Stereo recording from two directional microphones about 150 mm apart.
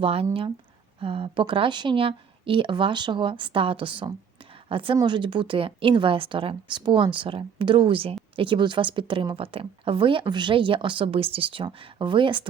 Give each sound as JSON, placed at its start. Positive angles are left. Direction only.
{"t": 0.0, "sound": "speech", "side_deg": -40}